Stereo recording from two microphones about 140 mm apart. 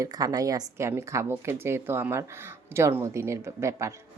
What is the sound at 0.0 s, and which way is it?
Speech, 25° right (ahead or behind).